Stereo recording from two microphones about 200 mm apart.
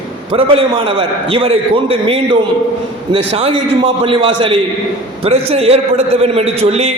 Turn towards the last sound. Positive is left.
turn(degrees=-30)  # may be behind; listen again after turning